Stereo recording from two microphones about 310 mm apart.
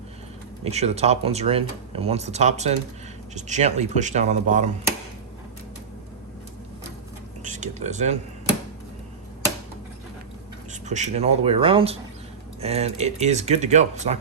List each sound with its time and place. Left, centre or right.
0.6 s speech: right
7.4 s speech: right
10.7 s speech: right